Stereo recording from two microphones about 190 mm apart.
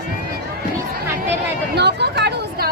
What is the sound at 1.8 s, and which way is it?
Chatter, 60° right (ahead or behind).